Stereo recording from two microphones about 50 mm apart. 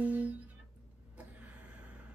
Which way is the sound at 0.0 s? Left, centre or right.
Right.